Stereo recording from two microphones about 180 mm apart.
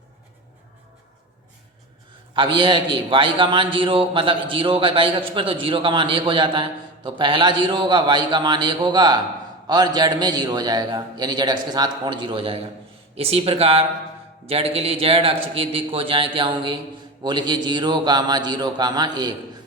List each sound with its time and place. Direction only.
2.3 s a man's voice: 25° right (ahead or behind)